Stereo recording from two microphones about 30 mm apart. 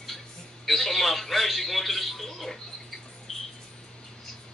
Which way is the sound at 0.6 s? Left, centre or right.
Centre.